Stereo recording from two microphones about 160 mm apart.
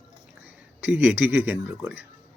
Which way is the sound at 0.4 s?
10° right (ahead or behind).